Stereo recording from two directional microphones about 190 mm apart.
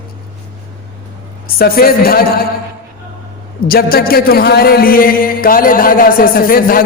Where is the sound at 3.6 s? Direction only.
50° left (ahead or behind).